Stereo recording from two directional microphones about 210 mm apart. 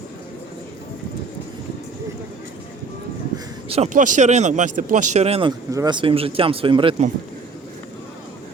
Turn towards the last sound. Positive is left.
turn(degrees=-25)  # may be behind; listen again after turning